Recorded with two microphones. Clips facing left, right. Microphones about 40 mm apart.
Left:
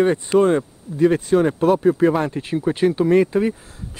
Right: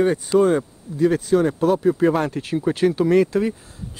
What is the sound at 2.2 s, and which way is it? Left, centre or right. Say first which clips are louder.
Speech: left 1 dB; centre.